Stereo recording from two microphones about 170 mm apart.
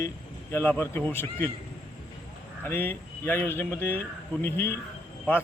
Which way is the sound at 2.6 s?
10° left (ahead or behind).